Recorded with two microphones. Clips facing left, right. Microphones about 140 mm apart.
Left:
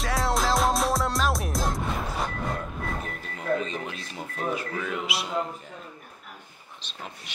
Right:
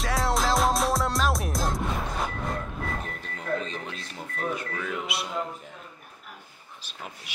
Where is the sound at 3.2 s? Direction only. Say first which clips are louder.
Left 5 dB; 5° left (ahead or behind).